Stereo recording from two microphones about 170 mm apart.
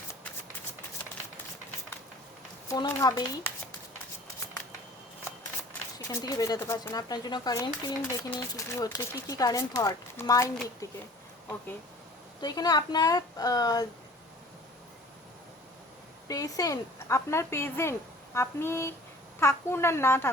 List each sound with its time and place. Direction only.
2.6 s speech: 20° left (ahead or behind)
6.1 s speech: 20° left (ahead or behind)
12.4 s speech: 25° left (ahead or behind)
16.3 s a woman's voice: 20° left (ahead or behind)